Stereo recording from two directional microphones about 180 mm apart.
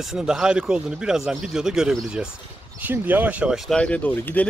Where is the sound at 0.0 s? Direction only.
5° right (ahead or behind).